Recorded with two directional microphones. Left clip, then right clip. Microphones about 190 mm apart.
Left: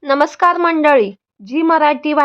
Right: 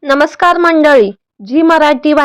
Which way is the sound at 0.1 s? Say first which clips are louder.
Right 4 dB; 20° right (ahead or behind).